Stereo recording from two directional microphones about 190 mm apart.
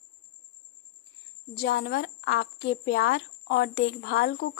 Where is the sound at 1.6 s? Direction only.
65° left (ahead or behind).